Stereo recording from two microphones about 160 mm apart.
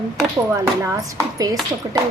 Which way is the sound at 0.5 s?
20° right (ahead or behind).